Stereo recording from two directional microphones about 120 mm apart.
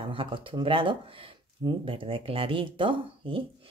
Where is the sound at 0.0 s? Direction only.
45° right (ahead or behind).